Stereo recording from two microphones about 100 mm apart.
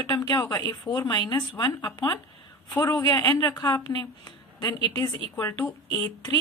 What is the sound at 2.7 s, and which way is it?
A woman's voice, 30° left (ahead or behind).